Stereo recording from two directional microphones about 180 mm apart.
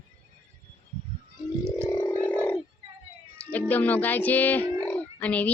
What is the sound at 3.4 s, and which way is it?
Speech, 10° left (ahead or behind).